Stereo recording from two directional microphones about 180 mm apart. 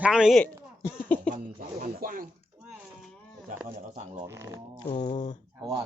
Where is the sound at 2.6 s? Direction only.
5° right (ahead or behind).